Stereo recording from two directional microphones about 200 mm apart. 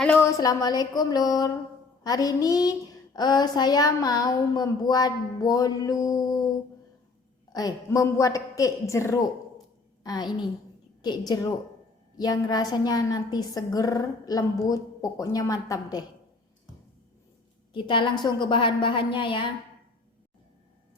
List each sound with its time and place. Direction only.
0.0 s a woman's voice: 10° left (ahead or behind)
7.5 s a man's voice: 15° left (ahead or behind)
12.1 s a woman's voice: 20° left (ahead or behind)
17.7 s a woman's voice: 25° left (ahead or behind)